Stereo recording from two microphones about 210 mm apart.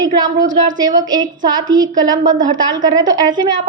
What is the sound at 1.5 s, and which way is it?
Speech, 20° right (ahead or behind).